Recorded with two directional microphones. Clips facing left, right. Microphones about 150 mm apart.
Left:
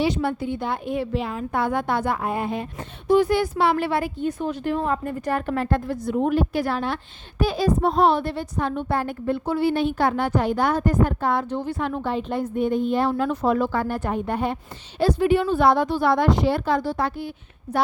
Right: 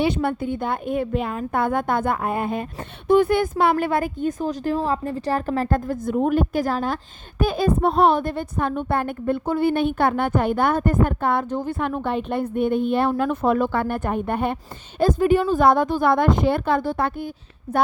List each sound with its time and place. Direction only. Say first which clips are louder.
0.0 s speech: right 1 dB; 55° right (ahead or behind)